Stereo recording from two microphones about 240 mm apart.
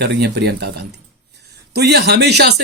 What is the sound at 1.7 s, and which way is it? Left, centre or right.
Speech, right.